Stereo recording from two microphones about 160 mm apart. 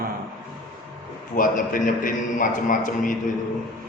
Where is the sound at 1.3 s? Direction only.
55° left (ahead or behind).